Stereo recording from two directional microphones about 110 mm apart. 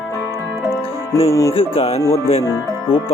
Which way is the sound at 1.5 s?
60° left (ahead or behind).